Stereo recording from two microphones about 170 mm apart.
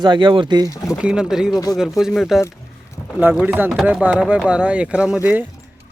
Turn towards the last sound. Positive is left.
turn(degrees=-5)  # may be behind; listen again after turning